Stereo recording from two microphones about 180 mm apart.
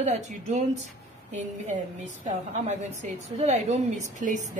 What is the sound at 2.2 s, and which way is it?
A woman's voice, 40° right (ahead or behind).